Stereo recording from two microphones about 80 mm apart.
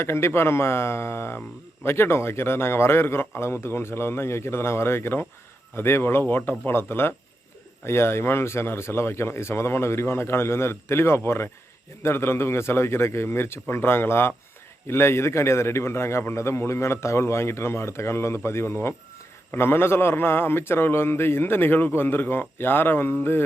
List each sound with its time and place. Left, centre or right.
0.0 s a man's voice: left